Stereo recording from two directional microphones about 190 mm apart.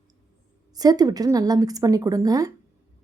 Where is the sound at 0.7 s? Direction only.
20° right (ahead or behind).